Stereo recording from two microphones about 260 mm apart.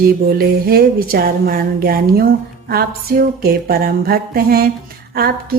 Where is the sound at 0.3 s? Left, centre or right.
Right.